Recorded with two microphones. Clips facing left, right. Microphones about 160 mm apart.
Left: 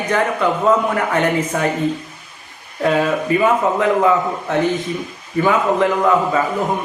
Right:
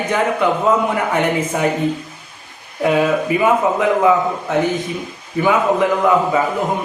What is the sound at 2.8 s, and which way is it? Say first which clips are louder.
A man's voice: right 1 dB; 15° right (ahead or behind).